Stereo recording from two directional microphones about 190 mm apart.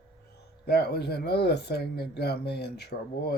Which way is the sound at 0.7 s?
55° left (ahead or behind).